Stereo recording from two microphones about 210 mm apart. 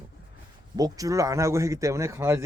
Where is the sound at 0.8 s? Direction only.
15° right (ahead or behind).